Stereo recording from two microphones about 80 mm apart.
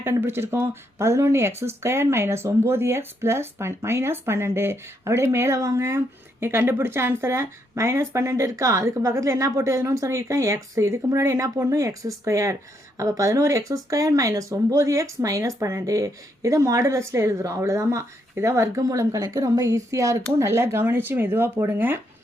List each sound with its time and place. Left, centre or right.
0.0 s speech: right